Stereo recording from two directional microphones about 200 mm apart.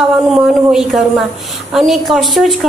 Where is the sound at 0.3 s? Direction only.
Centre (ahead or behind).